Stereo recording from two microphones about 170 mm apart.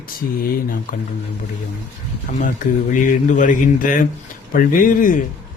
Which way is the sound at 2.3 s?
50° left (ahead or behind).